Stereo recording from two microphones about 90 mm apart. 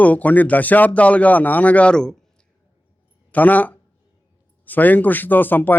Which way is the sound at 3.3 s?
20° left (ahead or behind).